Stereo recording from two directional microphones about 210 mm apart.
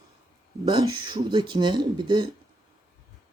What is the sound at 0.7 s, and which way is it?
Speech, 20° right (ahead or behind).